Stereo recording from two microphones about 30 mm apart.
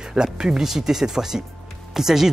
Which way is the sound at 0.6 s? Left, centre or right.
Centre.